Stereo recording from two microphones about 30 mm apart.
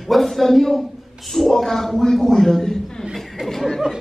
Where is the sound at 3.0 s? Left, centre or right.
Centre.